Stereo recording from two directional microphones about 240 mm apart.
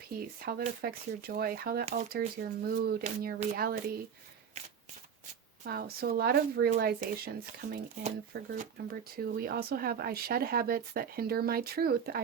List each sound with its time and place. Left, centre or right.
0.1 s speech: right
1.8 s speech: right
2.6 s speech: right
5.6 s speech: right